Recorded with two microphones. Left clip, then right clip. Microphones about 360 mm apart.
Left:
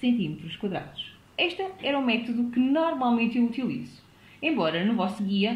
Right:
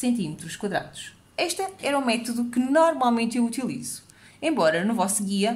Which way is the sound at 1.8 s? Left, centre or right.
Right.